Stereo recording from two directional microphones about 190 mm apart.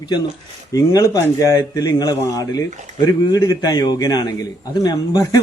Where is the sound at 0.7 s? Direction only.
20° left (ahead or behind).